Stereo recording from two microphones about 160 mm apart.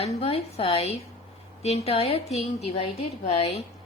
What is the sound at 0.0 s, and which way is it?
A woman's voice, 40° left (ahead or behind).